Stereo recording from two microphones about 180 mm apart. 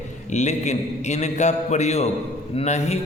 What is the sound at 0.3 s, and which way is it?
A man's voice, 40° left (ahead or behind).